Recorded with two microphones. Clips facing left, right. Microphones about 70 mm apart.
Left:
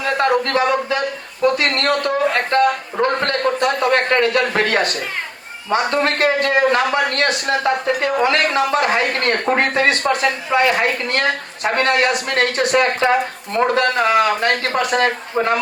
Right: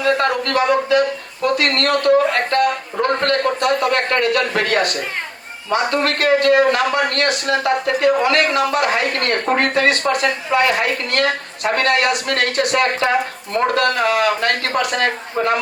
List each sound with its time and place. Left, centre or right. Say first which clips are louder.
0.0 s a man's voice: even; left